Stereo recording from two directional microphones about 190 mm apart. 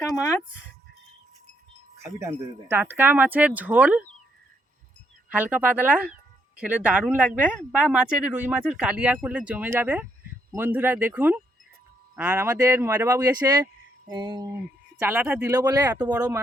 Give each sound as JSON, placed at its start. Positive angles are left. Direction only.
{"t": 2.0, "sound": "speech", "side_deg": -15}
{"t": 5.3, "sound": "speech", "side_deg": -10}
{"t": 14.1, "sound": "a sound", "side_deg": -20}
{"t": 14.9, "sound": "speech", "side_deg": -10}